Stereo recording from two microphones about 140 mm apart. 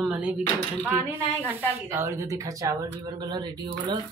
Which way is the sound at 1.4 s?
20° right (ahead or behind).